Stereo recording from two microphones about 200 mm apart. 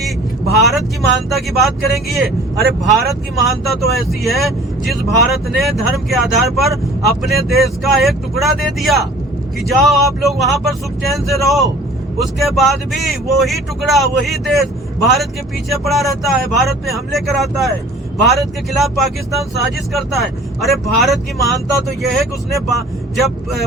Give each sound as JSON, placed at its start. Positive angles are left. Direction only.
{"t": 0.6, "sound": "speech", "side_deg": 0}